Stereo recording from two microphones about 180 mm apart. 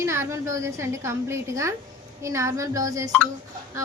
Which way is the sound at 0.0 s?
15° right (ahead or behind).